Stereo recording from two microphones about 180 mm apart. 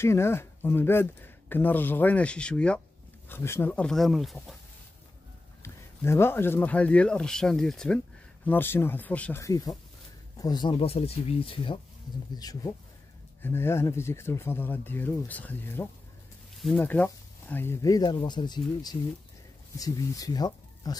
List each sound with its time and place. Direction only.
0.0 s speech: 15° left (ahead or behind)
5.6 s speech: 15° left (ahead or behind)